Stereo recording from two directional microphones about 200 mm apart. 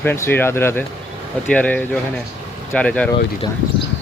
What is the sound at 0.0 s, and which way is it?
Speech, 10° left (ahead or behind).